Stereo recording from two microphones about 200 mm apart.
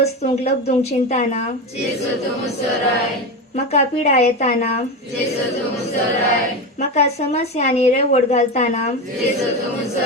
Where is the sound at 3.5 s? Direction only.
35° left (ahead or behind).